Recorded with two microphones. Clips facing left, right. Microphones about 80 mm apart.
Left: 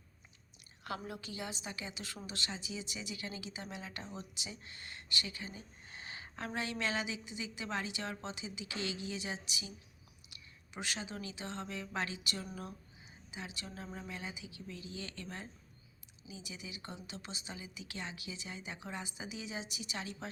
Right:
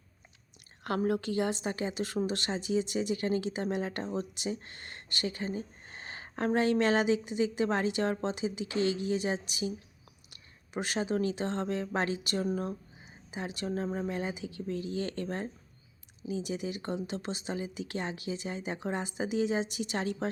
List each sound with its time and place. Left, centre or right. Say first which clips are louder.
0.9 s a woman's voice: right 13 dB; right